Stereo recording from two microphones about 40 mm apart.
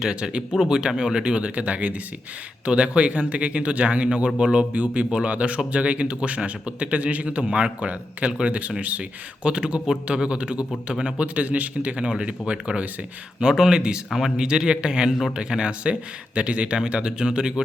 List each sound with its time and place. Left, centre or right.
0.0 s speech: right
8.8 s speech: right
13.4 s speech: centre
14.1 s speech: centre
14.3 s speech: right